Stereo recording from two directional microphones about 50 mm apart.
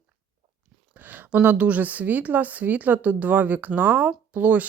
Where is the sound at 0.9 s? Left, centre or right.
Right.